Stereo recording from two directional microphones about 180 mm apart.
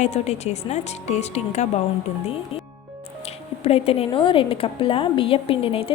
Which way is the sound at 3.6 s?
35° left (ahead or behind).